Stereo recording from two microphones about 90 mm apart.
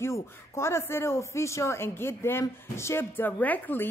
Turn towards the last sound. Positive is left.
turn(degrees=20)  # may be behind; listen again after turning